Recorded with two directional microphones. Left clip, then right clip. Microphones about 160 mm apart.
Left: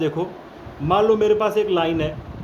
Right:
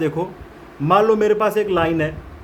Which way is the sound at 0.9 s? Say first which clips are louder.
Right 2 dB; 50° right (ahead or behind).